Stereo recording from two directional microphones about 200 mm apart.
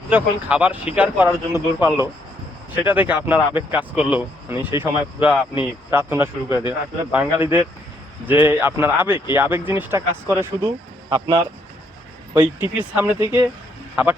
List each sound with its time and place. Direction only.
0.1 s speech: 5° right (ahead or behind)
12.3 s speech: 10° right (ahead or behind)